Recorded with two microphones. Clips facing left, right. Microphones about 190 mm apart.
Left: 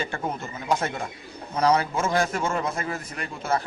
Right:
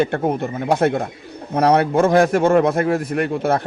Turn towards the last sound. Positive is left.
turn(degrees=-60)  # may be behind; listen again after turning